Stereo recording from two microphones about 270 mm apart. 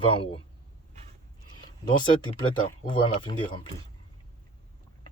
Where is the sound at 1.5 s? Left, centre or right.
Centre.